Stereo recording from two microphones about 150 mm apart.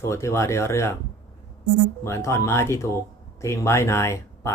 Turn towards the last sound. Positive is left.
turn(degrees=20)  # may be behind; listen again after turning